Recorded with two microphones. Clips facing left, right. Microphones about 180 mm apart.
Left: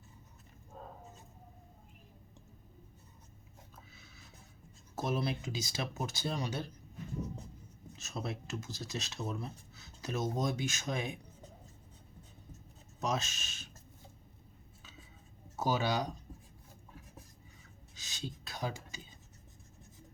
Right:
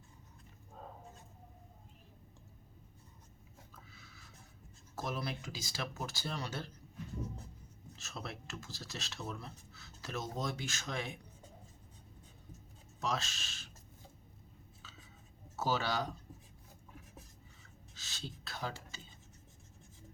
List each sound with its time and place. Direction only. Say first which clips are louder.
3.9 s a sound: even; 20° left (ahead or behind)
4.9 s speech: left 5 dB; 25° left (ahead or behind)
7.9 s speech: left 6 dB; 20° left (ahead or behind)
13.0 s speech: left 2 dB; 20° left (ahead or behind)
15.5 s speech: left 2 dB; 15° left (ahead or behind)
17.9 s a sound: left 4 dB; 15° left (ahead or behind)